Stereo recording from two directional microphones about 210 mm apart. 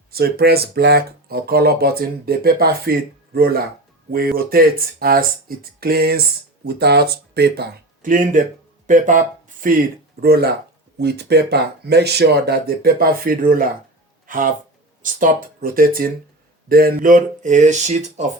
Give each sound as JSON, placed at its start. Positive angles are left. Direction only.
{"t": 0.1, "sound": "speech", "side_deg": -45}